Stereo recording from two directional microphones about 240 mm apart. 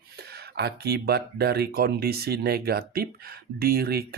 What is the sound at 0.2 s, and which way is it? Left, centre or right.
Speech, right.